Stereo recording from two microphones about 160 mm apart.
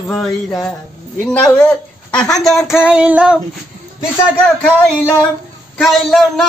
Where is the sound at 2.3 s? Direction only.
Centre (ahead or behind).